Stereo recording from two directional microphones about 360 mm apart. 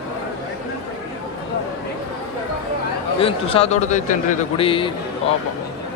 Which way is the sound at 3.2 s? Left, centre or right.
Centre.